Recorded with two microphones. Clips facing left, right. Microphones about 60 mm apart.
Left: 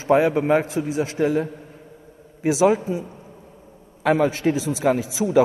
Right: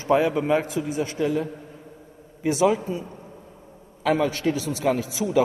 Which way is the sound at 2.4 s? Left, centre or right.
Left.